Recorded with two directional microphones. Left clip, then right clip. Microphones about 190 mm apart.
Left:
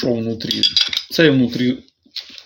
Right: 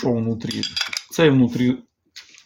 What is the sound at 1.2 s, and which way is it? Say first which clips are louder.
Speech: left 2 dB; 40° right (ahead or behind).